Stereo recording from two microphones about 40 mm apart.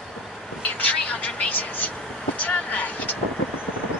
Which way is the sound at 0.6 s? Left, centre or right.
Left.